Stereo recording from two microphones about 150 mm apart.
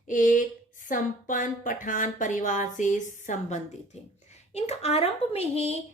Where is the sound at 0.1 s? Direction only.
60° left (ahead or behind).